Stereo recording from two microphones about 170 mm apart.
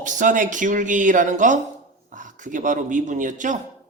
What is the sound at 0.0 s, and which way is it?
Speech, 50° right (ahead or behind).